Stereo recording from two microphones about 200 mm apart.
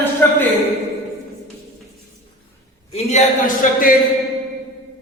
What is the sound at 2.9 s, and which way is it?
A man's voice, 40° left (ahead or behind).